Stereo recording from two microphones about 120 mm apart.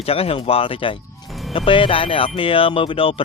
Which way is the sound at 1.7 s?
45° left (ahead or behind).